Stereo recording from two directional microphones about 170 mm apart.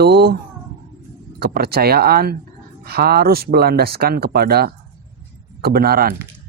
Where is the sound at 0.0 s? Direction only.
70° right (ahead or behind).